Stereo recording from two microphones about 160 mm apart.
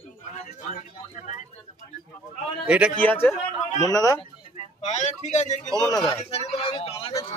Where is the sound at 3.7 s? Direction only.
20° left (ahead or behind).